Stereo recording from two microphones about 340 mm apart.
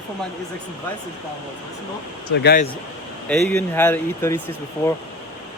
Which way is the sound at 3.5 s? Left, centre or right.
Centre.